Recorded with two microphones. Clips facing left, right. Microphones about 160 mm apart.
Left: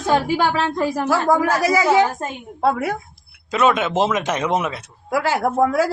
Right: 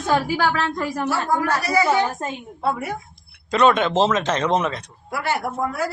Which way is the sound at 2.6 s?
75° left (ahead or behind).